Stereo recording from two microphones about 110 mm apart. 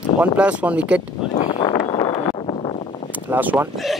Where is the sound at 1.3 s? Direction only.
90° left.